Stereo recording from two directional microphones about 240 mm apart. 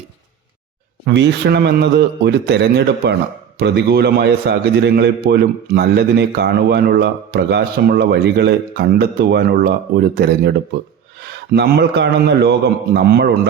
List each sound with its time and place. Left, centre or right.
1.0 s a man's voice: right